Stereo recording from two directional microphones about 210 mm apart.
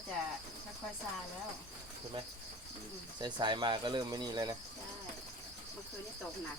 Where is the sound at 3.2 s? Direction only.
20° right (ahead or behind).